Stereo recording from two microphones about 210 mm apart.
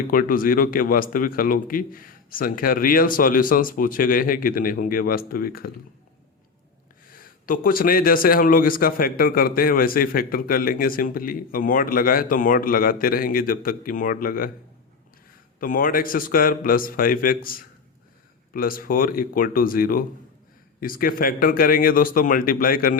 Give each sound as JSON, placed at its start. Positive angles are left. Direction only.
{"t": 0.1, "sound": "a man's voice", "side_deg": 40}
{"t": 7.1, "sound": "a man's voice", "side_deg": 40}
{"t": 15.6, "sound": "a man's voice", "side_deg": 40}